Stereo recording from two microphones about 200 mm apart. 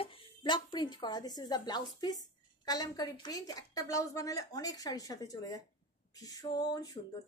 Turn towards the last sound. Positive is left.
turn(degrees=20)  # may be behind; listen again after turning